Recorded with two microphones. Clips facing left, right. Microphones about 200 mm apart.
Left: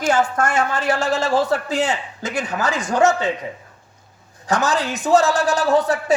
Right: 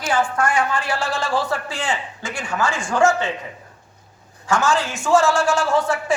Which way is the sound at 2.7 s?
20° left (ahead or behind).